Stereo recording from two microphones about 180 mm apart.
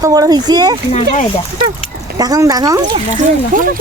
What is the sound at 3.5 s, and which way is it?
Speech, 50° right (ahead or behind).